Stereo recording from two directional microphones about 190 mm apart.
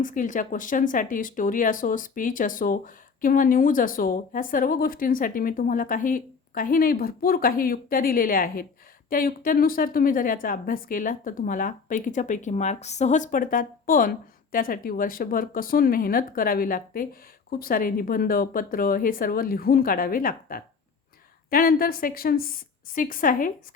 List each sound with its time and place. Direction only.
0.0 s speech: 45° left (ahead or behind)